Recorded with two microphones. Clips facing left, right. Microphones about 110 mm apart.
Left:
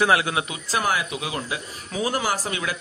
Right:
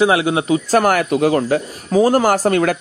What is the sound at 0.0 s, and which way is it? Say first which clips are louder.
Speech: right 6 dB; 25° right (ahead or behind).